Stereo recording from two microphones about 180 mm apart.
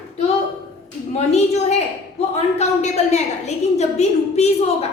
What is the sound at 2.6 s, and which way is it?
A woman's voice, 40° left (ahead or behind).